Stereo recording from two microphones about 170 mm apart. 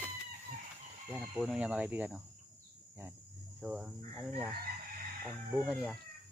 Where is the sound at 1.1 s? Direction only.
5° right (ahead or behind).